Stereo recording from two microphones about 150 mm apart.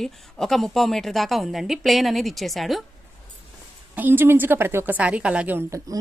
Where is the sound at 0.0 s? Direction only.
5° left (ahead or behind).